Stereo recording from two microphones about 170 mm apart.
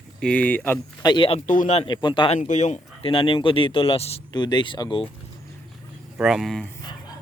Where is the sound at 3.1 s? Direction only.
30° left (ahead or behind).